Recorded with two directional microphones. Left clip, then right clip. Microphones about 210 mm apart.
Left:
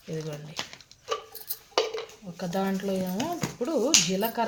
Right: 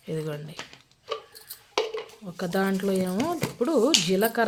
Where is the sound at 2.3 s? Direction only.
40° right (ahead or behind).